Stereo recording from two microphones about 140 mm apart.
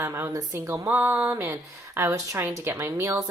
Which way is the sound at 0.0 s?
20° right (ahead or behind).